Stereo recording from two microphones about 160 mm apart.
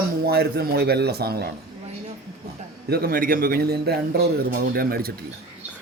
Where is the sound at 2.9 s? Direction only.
75° right (ahead or behind).